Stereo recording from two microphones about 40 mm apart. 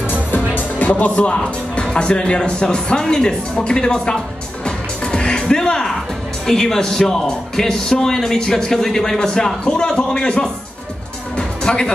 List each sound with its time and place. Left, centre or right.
0.7 s speech: left; by 4.2 s centre
4.6 s music: left
6.4 s a man's voice: centre
11.3 s music: centre